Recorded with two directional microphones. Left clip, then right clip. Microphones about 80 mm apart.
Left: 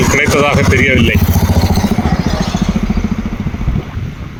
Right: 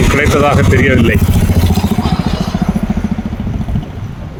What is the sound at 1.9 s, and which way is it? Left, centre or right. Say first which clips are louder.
Vehicle: even; centre.